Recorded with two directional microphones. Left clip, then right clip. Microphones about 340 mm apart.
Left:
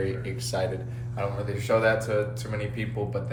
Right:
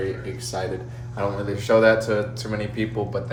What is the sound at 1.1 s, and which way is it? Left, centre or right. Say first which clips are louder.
Speech: right 5 dB; centre.